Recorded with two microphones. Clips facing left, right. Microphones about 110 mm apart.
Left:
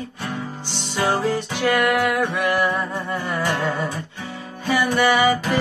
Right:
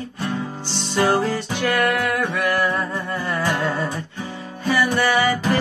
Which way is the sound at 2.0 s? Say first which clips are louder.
Left 1 dB; 15° left (ahead or behind).